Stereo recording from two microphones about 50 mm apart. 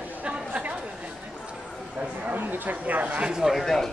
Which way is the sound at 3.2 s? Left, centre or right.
Centre.